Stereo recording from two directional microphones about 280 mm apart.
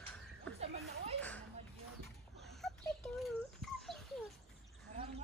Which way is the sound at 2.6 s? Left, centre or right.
Centre.